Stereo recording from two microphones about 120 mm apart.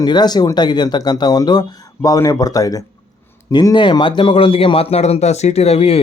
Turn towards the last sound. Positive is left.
turn(degrees=55)  # may be behind; listen again after turning